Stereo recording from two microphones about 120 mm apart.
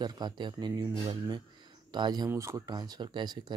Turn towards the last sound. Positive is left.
turn(degrees=-40)  # may be behind; listen again after turning